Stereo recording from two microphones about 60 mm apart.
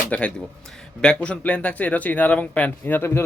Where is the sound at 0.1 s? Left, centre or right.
Centre.